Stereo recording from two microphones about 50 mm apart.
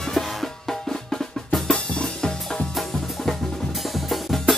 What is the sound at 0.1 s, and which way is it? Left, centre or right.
Drum, centre.